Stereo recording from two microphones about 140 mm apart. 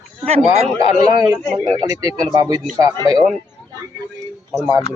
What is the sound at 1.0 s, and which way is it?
Speech, 25° right (ahead or behind).